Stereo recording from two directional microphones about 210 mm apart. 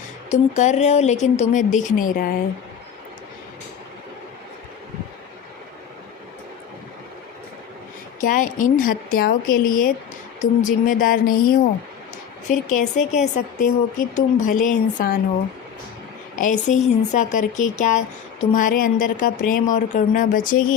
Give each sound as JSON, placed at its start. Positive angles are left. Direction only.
{"t": 0.3, "sound": "a woman's voice", "side_deg": 35}
{"t": 8.2, "sound": "a woman's voice", "side_deg": 40}
{"t": 12.5, "sound": "a woman's voice", "side_deg": 35}
{"t": 16.3, "sound": "a woman's voice", "side_deg": 40}